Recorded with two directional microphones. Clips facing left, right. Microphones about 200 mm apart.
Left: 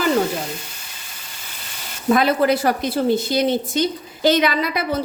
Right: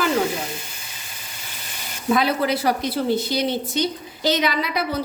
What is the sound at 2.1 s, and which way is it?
A woman's voice, 50° left (ahead or behind).